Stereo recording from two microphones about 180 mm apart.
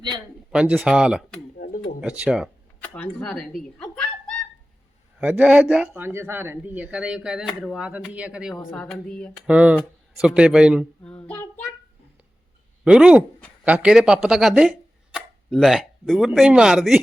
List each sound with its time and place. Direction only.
0.5 s speech: 5° right (ahead or behind)
1.5 s a sound: 55° left (ahead or behind)
2.0 s speech: 5° right (ahead or behind)
2.8 s speech: 5° left (ahead or behind)
5.2 s speech: 5° right (ahead or behind)
9.5 s speech: 5° right (ahead or behind)
11.0 s child singing: 5° left (ahead or behind)
12.8 s speech: 5° right (ahead or behind)